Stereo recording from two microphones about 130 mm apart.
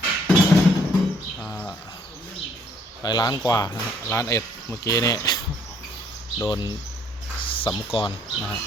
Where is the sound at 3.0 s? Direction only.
30° left (ahead or behind).